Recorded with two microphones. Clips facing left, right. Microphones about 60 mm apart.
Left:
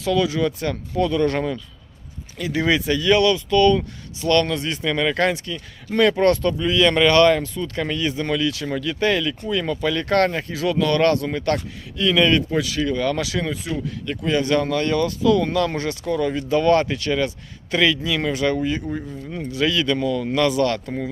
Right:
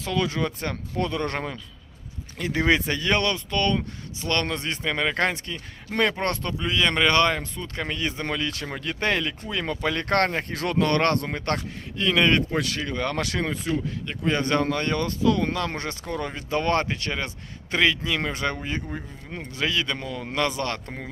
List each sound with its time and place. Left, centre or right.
0.0 s speech: right
10.5 s speech: right
12.5 s speech: right